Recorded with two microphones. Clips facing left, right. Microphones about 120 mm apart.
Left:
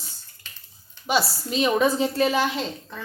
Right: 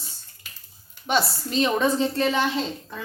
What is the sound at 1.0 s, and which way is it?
A woman's voice, 5° left (ahead or behind).